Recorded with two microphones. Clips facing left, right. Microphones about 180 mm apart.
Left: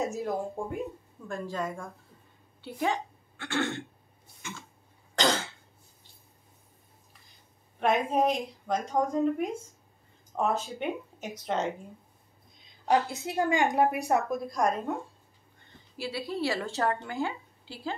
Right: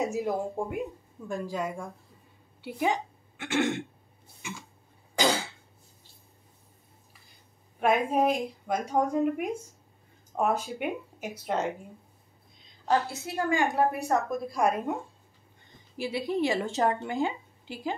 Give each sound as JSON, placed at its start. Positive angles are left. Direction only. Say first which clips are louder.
{"t": 0.0, "sound": "a woman's voice", "louder": "right 2 dB", "side_deg": -15}
{"t": 4.4, "sound": "throat clearing", "louder": "right 2 dB", "side_deg": -15}
{"t": 5.1, "sound": "cough", "louder": "right 1 dB", "side_deg": -10}
{"t": 7.8, "sound": "a woman's voice", "louder": "right 1 dB", "side_deg": -10}
{"t": 12.8, "sound": "a woman's voice", "louder": "left 1 dB", "side_deg": 15}
{"t": 14.3, "sound": "a woman's voice", "louder": "right 1 dB", "side_deg": -5}
{"t": 16.0, "sound": "a woman's voice", "louder": "right 4 dB", "side_deg": -20}